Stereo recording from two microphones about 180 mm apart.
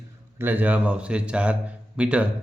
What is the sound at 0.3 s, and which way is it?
A man's voice, 10° right (ahead or behind).